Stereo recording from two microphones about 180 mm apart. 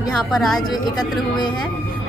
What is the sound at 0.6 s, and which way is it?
Speech, 20° left (ahead or behind).